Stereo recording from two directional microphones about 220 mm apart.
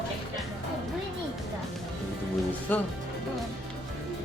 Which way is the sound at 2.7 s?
10° left (ahead or behind).